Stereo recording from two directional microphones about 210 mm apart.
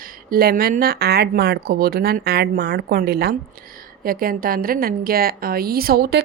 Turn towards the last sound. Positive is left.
turn(degrees=-45)  # may be behind; listen again after turning